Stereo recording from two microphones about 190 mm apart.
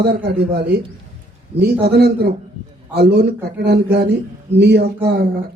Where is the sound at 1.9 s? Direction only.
55° right (ahead or behind).